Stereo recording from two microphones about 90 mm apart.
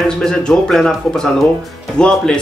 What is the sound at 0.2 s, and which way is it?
Speech, 10° left (ahead or behind).